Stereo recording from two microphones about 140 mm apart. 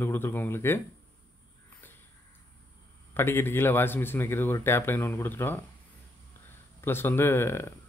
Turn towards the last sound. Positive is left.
turn(degrees=15)  # may be behind; listen again after turning